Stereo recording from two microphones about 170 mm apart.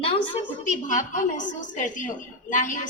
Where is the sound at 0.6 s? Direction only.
45° left (ahead or behind).